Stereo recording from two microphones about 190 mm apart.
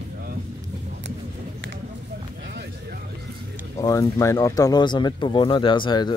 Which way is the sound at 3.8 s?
15° left (ahead or behind).